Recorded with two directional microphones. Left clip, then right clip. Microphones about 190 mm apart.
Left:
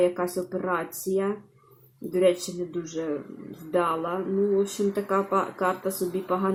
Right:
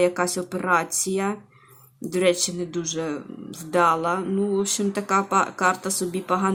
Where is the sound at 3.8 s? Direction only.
25° right (ahead or behind).